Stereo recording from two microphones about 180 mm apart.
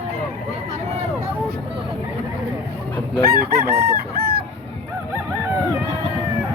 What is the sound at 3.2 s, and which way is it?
Chicken, 55° right (ahead or behind).